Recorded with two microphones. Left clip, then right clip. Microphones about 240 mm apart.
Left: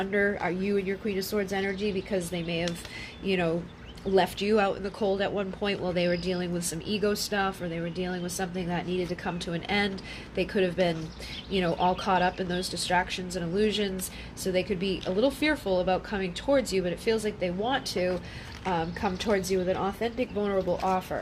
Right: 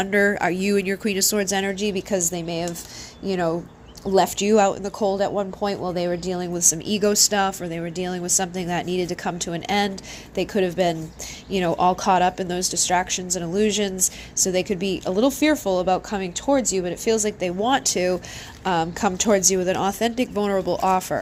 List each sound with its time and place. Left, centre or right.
0.0 s speech: right